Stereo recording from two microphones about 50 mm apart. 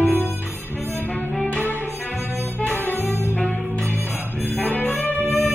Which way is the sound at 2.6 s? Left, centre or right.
Left.